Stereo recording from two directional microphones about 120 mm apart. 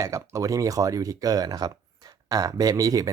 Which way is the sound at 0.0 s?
25° right (ahead or behind).